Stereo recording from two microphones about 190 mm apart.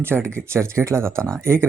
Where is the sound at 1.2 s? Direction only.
5° left (ahead or behind).